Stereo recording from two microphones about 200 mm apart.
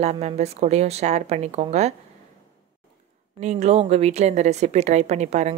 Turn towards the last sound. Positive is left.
turn(degrees=-35)  # may be behind; listen again after turning